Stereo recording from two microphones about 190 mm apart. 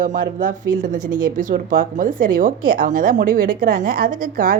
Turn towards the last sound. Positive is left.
turn(degrees=-45)  # may be behind; listen again after turning